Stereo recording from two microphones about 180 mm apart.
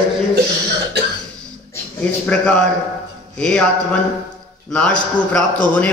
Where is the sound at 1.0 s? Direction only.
70° right (ahead or behind).